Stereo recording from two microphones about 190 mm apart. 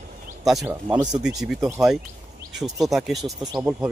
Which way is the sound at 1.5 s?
15° right (ahead or behind).